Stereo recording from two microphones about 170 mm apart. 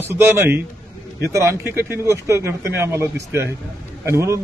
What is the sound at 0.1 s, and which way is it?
A man's voice, 15° right (ahead or behind).